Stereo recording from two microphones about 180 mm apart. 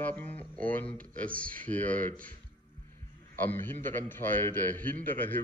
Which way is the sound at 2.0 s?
50° right (ahead or behind).